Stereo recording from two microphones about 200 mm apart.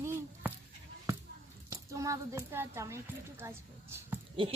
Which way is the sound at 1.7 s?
15° right (ahead or behind).